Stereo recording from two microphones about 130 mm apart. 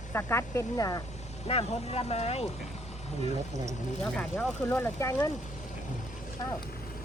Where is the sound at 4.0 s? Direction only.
5° left (ahead or behind).